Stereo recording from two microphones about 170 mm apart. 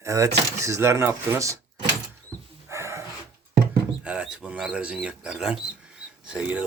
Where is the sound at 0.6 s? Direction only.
15° right (ahead or behind).